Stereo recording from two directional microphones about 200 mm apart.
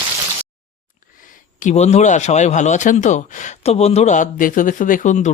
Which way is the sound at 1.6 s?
35° left (ahead or behind).